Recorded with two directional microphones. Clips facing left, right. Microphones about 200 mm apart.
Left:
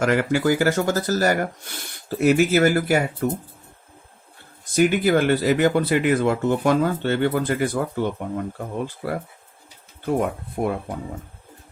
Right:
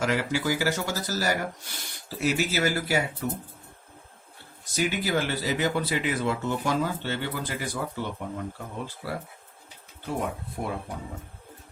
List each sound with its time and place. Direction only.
0.0 s speech: 55° left (ahead or behind)
4.7 s speech: 55° left (ahead or behind)
9.0 s speech: 55° left (ahead or behind)